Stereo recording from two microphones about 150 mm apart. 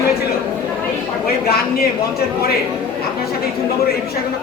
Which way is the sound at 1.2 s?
90° left.